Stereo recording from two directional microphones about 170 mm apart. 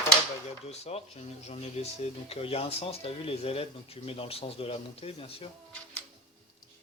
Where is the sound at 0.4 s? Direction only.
40° left (ahead or behind).